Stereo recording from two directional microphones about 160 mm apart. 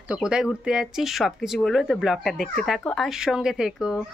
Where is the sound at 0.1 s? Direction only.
5° right (ahead or behind).